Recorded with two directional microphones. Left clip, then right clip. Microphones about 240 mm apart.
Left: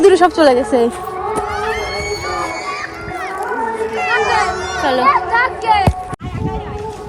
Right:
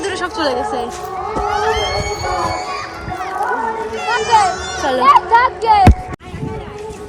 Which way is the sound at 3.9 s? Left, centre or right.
Left.